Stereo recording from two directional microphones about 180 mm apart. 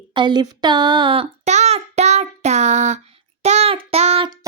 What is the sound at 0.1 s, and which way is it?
Speech, 25° right (ahead or behind).